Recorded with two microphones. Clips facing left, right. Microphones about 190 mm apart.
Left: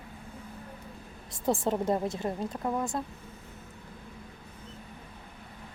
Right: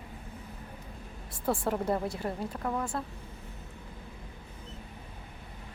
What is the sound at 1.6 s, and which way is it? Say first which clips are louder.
A woman's voice: left 2 dB; 25° left (ahead or behind).